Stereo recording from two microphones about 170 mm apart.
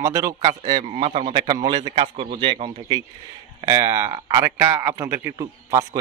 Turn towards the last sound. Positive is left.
turn(degrees=-20)  # may be behind; listen again after turning